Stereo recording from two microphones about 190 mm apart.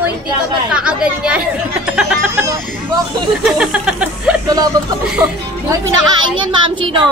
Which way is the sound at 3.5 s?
5° right (ahead or behind).